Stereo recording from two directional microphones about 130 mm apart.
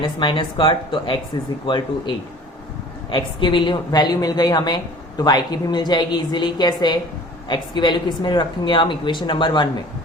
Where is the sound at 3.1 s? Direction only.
40° left (ahead or behind).